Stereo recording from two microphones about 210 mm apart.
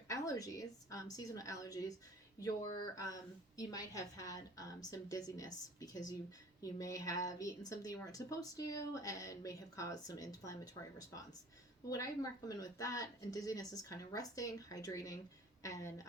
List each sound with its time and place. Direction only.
0.1 s speech: 15° left (ahead or behind)